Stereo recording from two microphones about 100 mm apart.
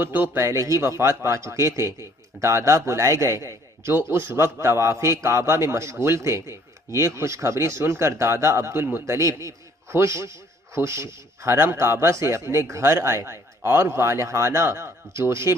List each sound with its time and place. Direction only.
0.0 s speech: 20° right (ahead or behind)